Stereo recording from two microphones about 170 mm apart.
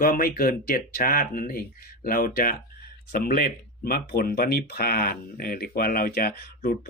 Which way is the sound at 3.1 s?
70° left (ahead or behind).